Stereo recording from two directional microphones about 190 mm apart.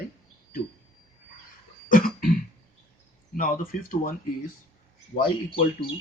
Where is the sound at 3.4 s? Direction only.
45° left (ahead or behind).